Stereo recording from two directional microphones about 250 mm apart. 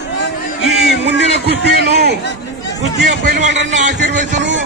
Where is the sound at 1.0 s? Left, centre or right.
Right.